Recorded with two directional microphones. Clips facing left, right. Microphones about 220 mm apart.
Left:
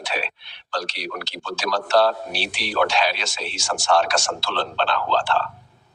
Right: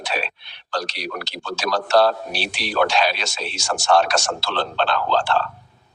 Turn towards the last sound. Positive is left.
turn(degrees=-45)  # may be behind; listen again after turning